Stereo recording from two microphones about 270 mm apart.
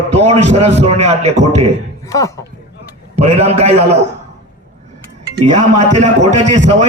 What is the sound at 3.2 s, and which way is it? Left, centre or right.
Speech, right.